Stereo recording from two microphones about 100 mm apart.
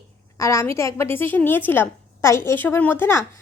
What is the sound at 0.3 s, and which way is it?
A woman's voice, 30° left (ahead or behind).